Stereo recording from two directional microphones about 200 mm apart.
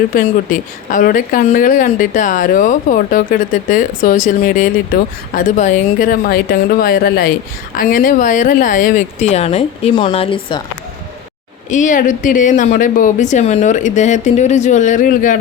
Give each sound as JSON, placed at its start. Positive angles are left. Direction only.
{"t": 0.1, "sound": "a woman's voice", "side_deg": 45}
{"t": 11.7, "sound": "speech", "side_deg": 40}